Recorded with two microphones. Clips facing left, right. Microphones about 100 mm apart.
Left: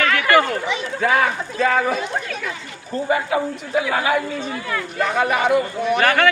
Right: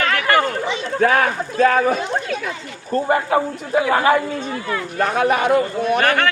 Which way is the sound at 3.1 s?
50° right (ahead or behind).